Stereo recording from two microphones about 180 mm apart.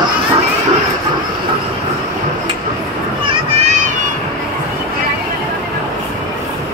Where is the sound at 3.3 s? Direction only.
40° right (ahead or behind).